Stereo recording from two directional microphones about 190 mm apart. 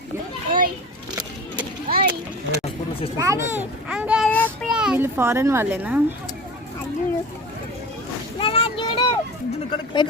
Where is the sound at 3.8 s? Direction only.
5° right (ahead or behind).